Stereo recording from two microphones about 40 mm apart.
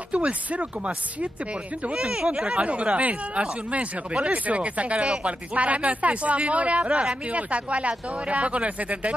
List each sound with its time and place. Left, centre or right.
0.1 s speech: right
2.0 s speech: centre
2.6 s speech: right